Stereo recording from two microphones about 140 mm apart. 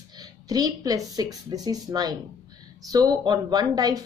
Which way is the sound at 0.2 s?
25° right (ahead or behind).